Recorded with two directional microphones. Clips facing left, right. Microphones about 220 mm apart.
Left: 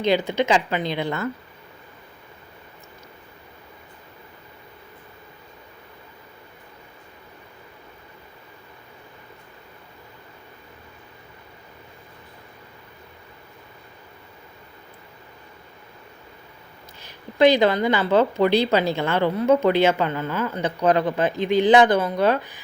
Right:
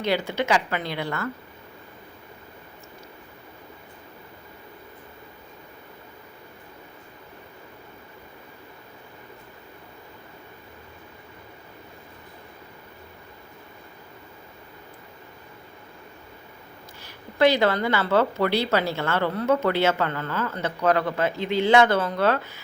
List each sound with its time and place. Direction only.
0.0 s a woman's voice: 20° left (ahead or behind)
17.0 s a woman's voice: 20° left (ahead or behind)